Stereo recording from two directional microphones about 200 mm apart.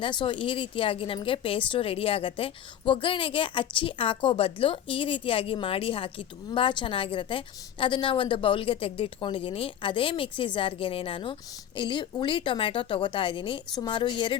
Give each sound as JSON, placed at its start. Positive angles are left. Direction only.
{"t": 0.0, "sound": "speech", "side_deg": 25}